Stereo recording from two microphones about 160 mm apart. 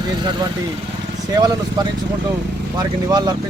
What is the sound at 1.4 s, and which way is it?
Speech, 25° right (ahead or behind).